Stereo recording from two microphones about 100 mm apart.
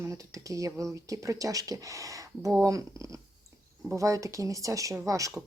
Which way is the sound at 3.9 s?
30° right (ahead or behind).